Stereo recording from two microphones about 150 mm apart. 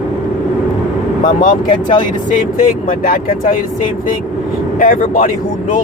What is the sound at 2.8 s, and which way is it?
Speech, 65° left (ahead or behind).